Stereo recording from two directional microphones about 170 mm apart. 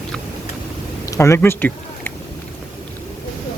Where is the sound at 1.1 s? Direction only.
15° left (ahead or behind).